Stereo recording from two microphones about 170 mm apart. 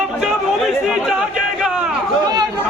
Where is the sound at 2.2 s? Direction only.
25° right (ahead or behind).